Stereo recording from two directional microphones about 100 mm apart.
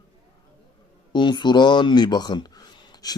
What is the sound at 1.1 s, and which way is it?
Speech, 50° left (ahead or behind).